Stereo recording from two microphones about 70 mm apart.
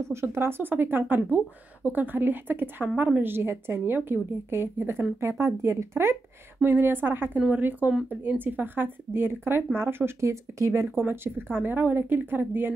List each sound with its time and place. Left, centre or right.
0.0 s a woman's voice: right
6.6 s a woman's voice: right
11.1 s a woman's voice: right